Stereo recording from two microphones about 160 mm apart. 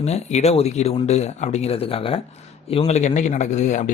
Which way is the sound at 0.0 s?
45° left (ahead or behind).